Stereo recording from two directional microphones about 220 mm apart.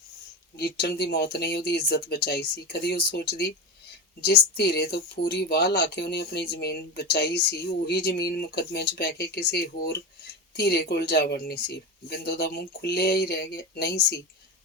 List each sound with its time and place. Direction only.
0.5 s speech: 50° left (ahead or behind)